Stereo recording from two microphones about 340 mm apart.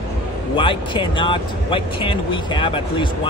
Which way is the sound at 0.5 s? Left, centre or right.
Centre.